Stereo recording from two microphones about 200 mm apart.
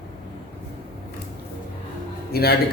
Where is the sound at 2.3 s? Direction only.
50° left (ahead or behind).